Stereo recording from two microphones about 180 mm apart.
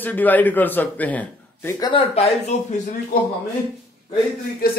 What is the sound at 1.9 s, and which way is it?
Speech, 30° left (ahead or behind).